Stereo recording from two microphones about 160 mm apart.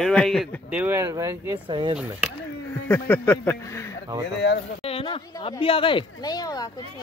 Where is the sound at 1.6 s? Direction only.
30° right (ahead or behind).